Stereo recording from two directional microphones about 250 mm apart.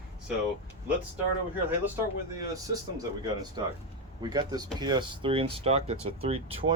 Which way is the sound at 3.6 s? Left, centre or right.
Centre.